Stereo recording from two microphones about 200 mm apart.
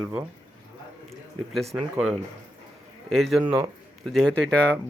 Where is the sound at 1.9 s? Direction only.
5° right (ahead or behind).